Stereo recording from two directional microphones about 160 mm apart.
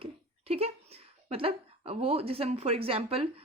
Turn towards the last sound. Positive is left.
turn(degrees=-35)  # may be behind; listen again after turning